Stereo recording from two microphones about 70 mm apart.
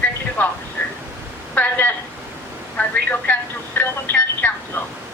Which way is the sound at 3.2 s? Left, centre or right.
Left.